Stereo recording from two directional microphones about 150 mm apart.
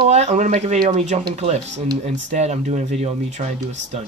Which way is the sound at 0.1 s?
50° right (ahead or behind).